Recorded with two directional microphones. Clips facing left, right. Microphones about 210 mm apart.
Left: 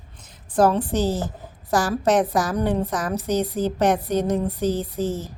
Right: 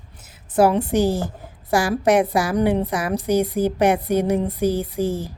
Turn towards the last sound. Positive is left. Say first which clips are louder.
# right 2 dB
turn(degrees=-10)  # may be behind; listen again after turning